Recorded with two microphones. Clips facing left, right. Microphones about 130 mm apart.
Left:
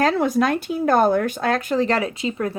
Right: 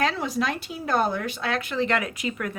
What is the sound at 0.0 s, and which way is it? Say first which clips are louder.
Speech: left 7 dB; 50° left (ahead or behind).